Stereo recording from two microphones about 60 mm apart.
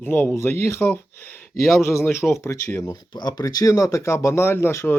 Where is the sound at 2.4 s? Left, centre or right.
Left.